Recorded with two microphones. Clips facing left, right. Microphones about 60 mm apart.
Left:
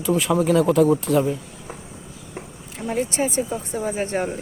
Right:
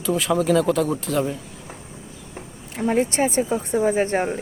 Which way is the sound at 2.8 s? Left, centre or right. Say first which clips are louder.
Right 3 dB; right.